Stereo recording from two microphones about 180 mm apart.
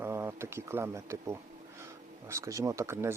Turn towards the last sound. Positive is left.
turn(degrees=-15)  # may be behind; listen again after turning